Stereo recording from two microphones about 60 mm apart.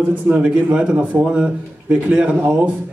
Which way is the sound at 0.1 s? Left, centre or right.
Right.